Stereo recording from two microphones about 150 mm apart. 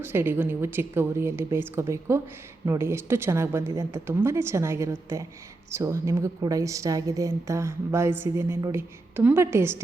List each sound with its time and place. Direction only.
0.0 s a woman's voice: 15° right (ahead or behind)